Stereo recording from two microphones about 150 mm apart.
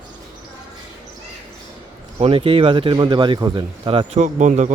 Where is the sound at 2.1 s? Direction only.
40° right (ahead or behind).